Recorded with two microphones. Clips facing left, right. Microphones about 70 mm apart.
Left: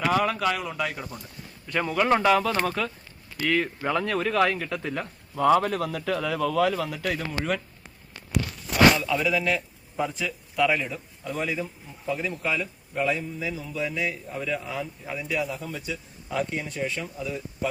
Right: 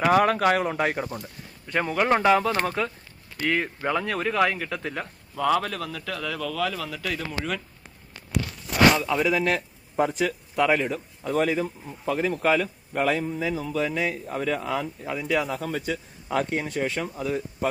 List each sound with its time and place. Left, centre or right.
0.1 s speech: right
1.6 s a man's voice: right
3.8 s speech: centre
5.3 s speech: centre
7.1 s speech: centre
9.0 s speech: right
10.0 s a man's voice: right
10.5 s speech: right
14.3 s a man's voice: right
15.4 s speech: right
15.9 s a man's voice: right